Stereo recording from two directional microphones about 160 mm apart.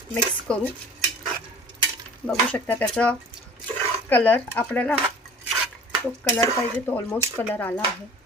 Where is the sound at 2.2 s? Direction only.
10° left (ahead or behind).